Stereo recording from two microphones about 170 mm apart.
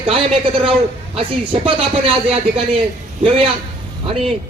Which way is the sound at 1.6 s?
35° right (ahead or behind).